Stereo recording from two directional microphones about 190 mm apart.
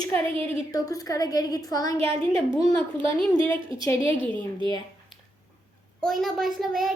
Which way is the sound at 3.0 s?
25° right (ahead or behind).